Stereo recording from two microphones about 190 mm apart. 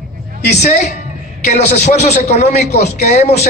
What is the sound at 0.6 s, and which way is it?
A man's voice, 35° left (ahead or behind).